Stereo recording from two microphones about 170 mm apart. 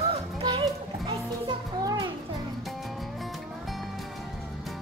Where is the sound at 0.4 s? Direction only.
25° right (ahead or behind).